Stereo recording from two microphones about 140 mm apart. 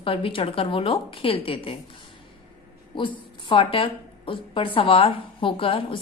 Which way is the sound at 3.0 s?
35° left (ahead or behind).